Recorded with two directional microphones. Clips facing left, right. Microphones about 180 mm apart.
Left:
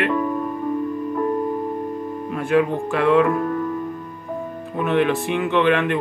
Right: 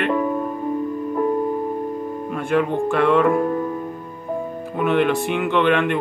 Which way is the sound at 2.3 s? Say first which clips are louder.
Left 1 dB; centre (ahead or behind).